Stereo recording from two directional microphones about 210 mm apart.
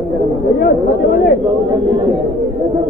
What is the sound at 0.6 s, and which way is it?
Speech, 40° left (ahead or behind).